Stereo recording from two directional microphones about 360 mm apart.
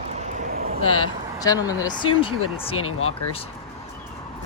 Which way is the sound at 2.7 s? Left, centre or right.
Left.